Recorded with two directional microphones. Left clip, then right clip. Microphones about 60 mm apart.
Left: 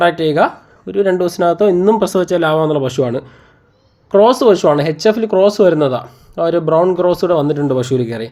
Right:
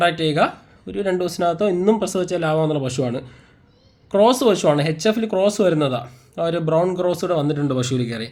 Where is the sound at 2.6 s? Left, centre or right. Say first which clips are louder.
Left 7 dB; left.